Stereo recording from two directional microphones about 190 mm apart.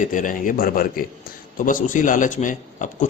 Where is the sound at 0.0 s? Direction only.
45° left (ahead or behind).